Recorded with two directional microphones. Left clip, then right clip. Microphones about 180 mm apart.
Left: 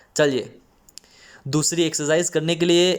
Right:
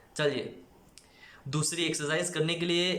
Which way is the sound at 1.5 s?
45° left (ahead or behind).